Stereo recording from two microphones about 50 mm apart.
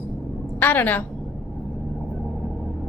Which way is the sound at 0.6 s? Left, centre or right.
Left.